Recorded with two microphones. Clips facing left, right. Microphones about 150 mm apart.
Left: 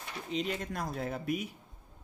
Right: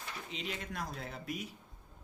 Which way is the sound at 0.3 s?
40° left (ahead or behind).